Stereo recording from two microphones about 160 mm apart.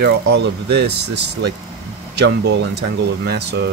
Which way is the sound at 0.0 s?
90° right.